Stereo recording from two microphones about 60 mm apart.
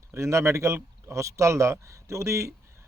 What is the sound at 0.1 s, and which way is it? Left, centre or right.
A man's voice, right.